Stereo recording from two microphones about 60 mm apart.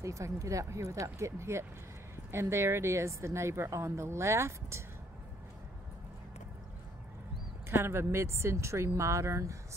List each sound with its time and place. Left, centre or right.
0.0 s a woman's voice: right
7.7 s a woman's voice: right